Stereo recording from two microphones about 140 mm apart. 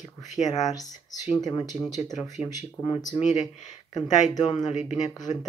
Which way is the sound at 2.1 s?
30° left (ahead or behind).